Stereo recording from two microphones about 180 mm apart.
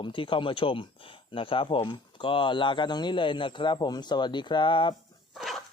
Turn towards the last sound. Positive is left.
turn(degrees=0)  # may be behind; listen again after turning